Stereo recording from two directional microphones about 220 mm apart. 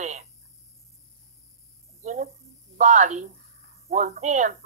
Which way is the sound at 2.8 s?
35° right (ahead or behind).